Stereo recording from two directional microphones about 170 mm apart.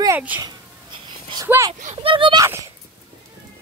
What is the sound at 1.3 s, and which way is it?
Speech, 20° right (ahead or behind).